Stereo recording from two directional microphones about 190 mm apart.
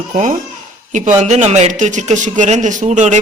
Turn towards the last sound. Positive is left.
turn(degrees=-40)  # may be behind; listen again after turning